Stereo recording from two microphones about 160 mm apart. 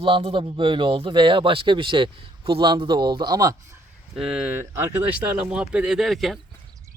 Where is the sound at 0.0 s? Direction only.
35° right (ahead or behind); by 3.8 s 20° right (ahead or behind).